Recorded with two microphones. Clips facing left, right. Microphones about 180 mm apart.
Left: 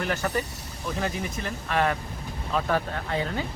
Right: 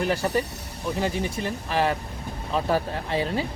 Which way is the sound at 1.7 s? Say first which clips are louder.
Even; 30° right (ahead or behind).